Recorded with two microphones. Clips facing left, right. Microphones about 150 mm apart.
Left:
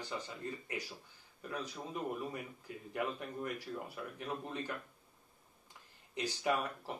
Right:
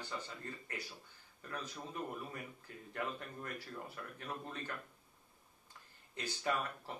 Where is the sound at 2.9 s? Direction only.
15° left (ahead or behind).